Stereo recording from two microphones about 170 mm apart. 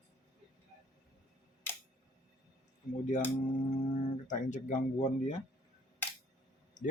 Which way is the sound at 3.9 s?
45° left (ahead or behind).